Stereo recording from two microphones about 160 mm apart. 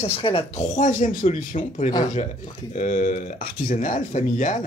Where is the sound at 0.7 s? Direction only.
50° left (ahead or behind).